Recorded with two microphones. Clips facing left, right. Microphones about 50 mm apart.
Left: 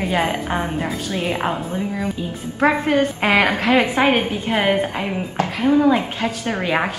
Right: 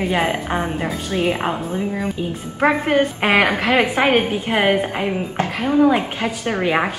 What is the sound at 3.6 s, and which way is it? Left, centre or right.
A woman's voice, centre.